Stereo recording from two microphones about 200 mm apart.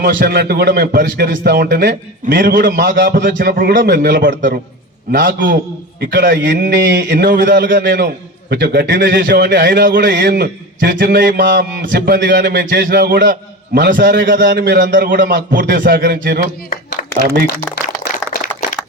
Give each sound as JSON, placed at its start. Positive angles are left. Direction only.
{"t": 0.0, "sound": "a man's voice", "side_deg": -50}
{"t": 9.1, "sound": "a man's voice", "side_deg": -45}
{"t": 16.6, "sound": "a sound", "side_deg": 45}